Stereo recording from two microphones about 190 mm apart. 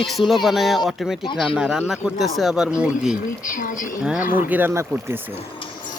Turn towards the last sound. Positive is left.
turn(degrees=-10)  # may be behind; listen again after turning